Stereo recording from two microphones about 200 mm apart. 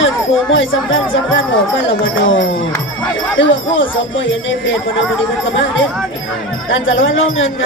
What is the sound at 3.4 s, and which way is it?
Speech, 70° left (ahead or behind).